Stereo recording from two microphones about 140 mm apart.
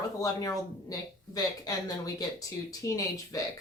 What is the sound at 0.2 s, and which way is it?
A woman's voice, 25° left (ahead or behind).